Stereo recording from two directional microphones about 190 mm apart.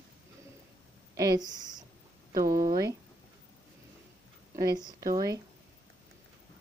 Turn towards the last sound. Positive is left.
turn(degrees=-20)  # may be behind; listen again after turning